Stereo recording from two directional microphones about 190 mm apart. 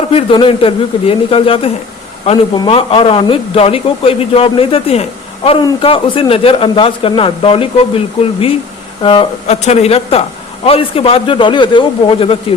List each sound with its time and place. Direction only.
0.1 s speech: 30° left (ahead or behind)